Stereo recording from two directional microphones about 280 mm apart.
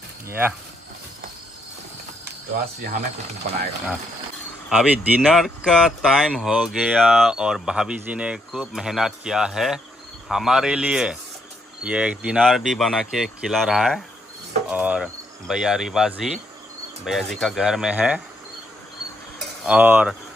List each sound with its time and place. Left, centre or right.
0.3 s speech: centre
4.6 s speech: centre
19.6 s speech: centre